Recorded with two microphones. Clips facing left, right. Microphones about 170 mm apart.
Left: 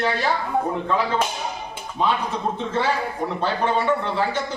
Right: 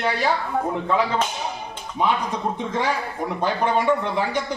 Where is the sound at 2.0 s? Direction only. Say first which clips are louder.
Even; 15° right (ahead or behind).